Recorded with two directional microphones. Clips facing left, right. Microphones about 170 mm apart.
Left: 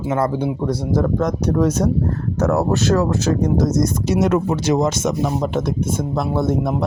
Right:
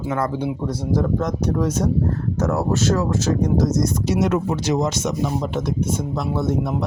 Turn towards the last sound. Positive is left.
turn(degrees=50)  # may be behind; listen again after turning